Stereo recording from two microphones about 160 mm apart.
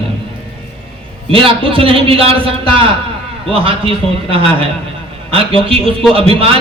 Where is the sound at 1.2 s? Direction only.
35° right (ahead or behind).